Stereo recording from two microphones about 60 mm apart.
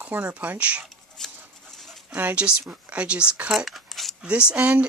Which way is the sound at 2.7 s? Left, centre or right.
Right.